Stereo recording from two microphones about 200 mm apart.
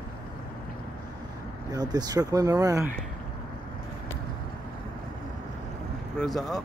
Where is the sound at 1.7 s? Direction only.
20° right (ahead or behind).